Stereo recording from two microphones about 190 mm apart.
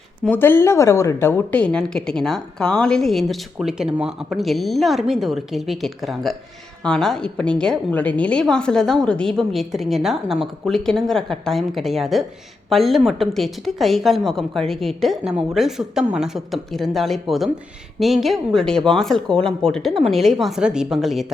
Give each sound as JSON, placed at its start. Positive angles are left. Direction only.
{"t": 0.3, "sound": "a woman's voice", "side_deg": 10}